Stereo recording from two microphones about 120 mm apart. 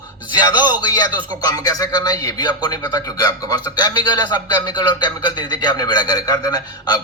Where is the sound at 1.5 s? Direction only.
30° left (ahead or behind).